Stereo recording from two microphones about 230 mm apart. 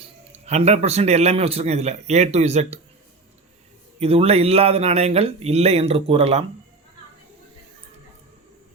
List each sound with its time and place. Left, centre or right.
0.0 s a man's voice: right
4.0 s a man's voice: right